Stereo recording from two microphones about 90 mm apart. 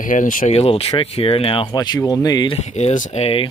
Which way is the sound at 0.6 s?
90° left.